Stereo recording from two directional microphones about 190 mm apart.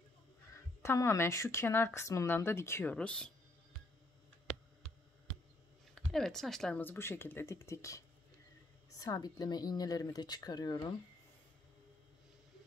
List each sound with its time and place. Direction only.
0.8 s speech: 15° left (ahead or behind)
6.1 s speech: centre (ahead or behind); by 11.0 s 20° left (ahead or behind)